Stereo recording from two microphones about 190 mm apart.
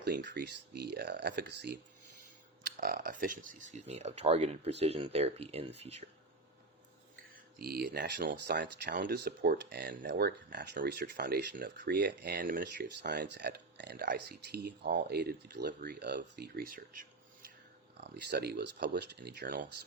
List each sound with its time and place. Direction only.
0.0 s speech: 65° right (ahead or behind); by 6.1 s 35° right (ahead or behind)
7.6 s speech: 55° right (ahead or behind)
18.0 s speech: 60° right (ahead or behind)